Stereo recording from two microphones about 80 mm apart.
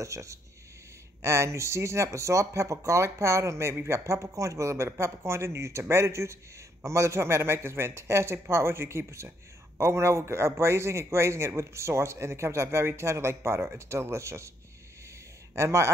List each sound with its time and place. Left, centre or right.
0.0 s a man's voice: right
15.5 s a man's voice: right